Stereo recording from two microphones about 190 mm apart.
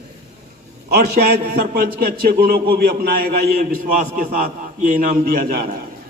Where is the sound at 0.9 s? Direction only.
55° right (ahead or behind).